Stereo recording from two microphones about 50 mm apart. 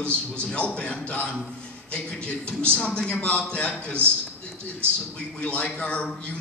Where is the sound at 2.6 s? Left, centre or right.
Left.